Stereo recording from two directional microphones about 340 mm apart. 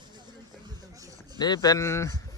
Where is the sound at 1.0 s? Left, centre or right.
Centre.